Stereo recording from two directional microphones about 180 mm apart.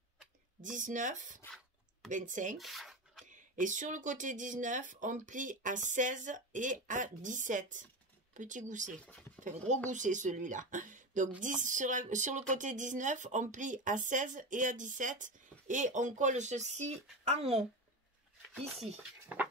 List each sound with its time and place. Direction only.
0.7 s speech: 45° right (ahead or behind)
2.5 s rub: centre (ahead or behind)
3.3 s speech: 45° right (ahead or behind)
18.8 s speech: 10° right (ahead or behind)